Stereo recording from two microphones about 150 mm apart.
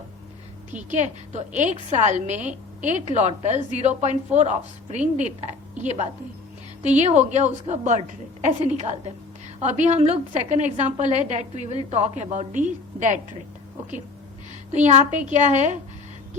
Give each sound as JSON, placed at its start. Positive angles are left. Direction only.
{"t": 0.9, "sound": "a woman's voice", "side_deg": -50}
{"t": 6.8, "sound": "a woman's voice", "side_deg": -50}
{"t": 14.8, "sound": "a woman's voice", "side_deg": -50}